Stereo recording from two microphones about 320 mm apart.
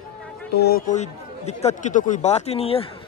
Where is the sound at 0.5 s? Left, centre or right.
Left.